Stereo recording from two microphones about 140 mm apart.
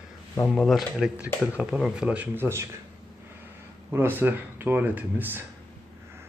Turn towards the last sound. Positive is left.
turn(degrees=-15)  # may be behind; listen again after turning